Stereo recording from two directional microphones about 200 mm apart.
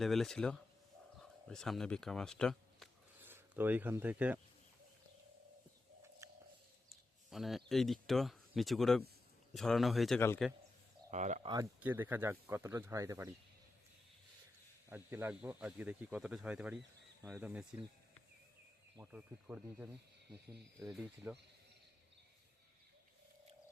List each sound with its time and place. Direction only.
0.0 s speech: centre (ahead or behind)
3.2 s speech: 10° right (ahead or behind)
6.2 s a sound: 15° right (ahead or behind)
7.3 s speech: centre (ahead or behind)
10.2 s speech: 10° left (ahead or behind)
11.1 s speech: 35° right (ahead or behind)
11.4 s speech: 20° right (ahead or behind)
14.8 s speech: 10° right (ahead or behind)
18.9 s speech: 5° right (ahead or behind)